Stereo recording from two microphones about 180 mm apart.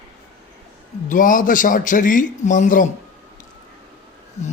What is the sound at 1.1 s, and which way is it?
A man's voice, 50° left (ahead or behind).